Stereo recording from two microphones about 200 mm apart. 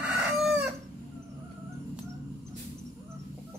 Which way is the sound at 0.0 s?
5° right (ahead or behind).